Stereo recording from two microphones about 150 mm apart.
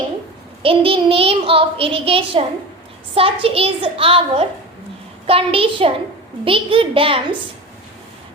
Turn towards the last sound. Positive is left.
turn(degrees=-35)  # may be behind; listen again after turning